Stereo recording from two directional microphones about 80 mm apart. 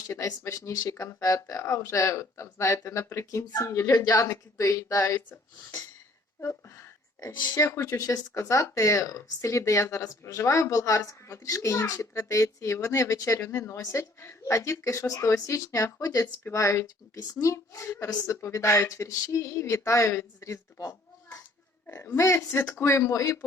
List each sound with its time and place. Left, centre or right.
0.1 s a woman's voice: left
6.4 s a woman's voice: left
16.5 s a woman's voice: left
21.8 s a woman's voice: left